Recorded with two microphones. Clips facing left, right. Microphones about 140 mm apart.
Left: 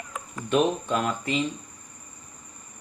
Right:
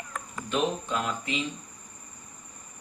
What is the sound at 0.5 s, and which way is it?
Speech, 50° left (ahead or behind).